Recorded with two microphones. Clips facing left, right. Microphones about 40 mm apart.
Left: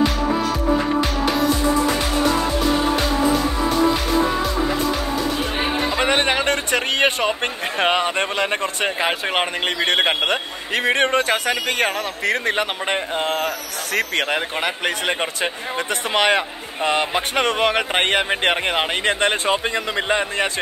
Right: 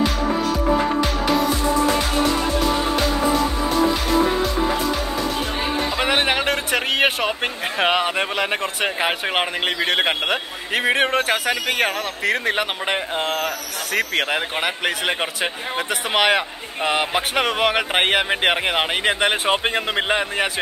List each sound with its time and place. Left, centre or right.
1.2 s music: centre
5.9 s a sound: centre
7.8 s a man's voice: centre
19.5 s a man's voice: right
20.2 s a man's voice: centre